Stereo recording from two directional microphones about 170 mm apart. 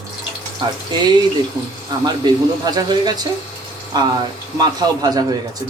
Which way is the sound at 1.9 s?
25° right (ahead or behind).